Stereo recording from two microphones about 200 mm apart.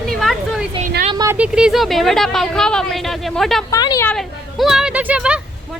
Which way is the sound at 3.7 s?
20° left (ahead or behind).